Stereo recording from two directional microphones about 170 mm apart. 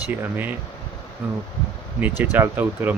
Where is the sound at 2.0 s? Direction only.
10° right (ahead or behind).